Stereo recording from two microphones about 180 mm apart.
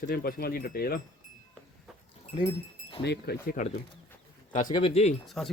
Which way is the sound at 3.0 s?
65° left (ahead or behind).